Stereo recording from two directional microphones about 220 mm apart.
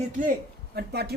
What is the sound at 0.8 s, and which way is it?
Speech, 45° right (ahead or behind).